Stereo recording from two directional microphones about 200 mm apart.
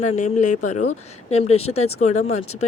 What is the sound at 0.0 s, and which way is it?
Speech, 35° left (ahead or behind).